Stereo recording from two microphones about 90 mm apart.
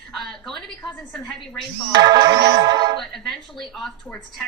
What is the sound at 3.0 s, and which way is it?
Speech, 5° left (ahead or behind).